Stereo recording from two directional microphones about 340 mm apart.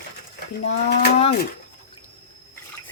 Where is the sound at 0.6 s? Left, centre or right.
Left.